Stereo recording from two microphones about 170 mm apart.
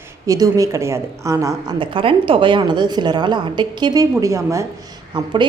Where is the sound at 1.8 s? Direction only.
30° right (ahead or behind).